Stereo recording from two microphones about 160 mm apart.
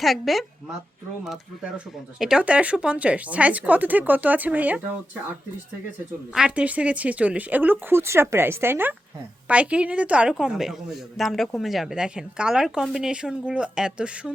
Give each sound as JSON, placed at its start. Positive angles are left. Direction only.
{"t": 0.0, "sound": "a woman's voice", "side_deg": 0}
{"t": 2.1, "sound": "a woman's voice", "side_deg": -5}
{"t": 6.3, "sound": "a woman's voice", "side_deg": -5}